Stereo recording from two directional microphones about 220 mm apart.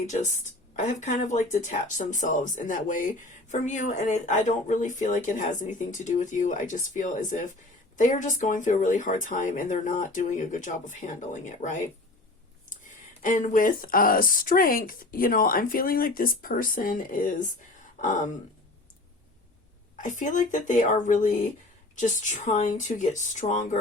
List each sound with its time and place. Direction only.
0.8 s speech: 35° left (ahead or behind)
20.0 s speech: 35° left (ahead or behind)